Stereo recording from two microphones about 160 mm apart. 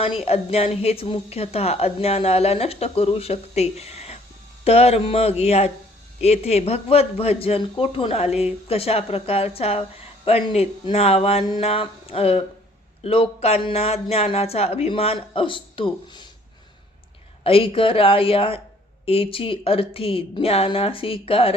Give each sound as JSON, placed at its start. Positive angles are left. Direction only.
{"t": 0.2, "sound": "a woman's voice", "side_deg": 40}
{"t": 17.4, "sound": "a woman's voice", "side_deg": 35}